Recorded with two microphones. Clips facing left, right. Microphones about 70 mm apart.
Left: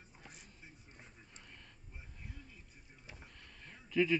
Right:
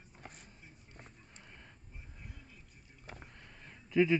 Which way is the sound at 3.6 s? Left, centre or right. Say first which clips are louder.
Right 4 dB; centre.